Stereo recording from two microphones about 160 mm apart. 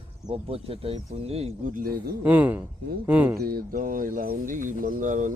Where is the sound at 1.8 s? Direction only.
70° right (ahead or behind).